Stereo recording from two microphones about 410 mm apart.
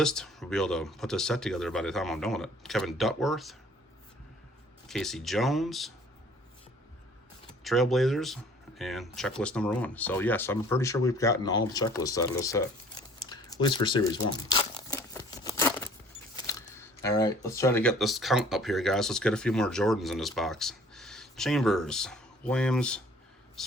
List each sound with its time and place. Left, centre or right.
0.0 s speech: centre
4.9 s speech: centre
7.6 s speech: centre
14.5 s tearing: centre
16.3 s speech: centre
23.6 s a sound: centre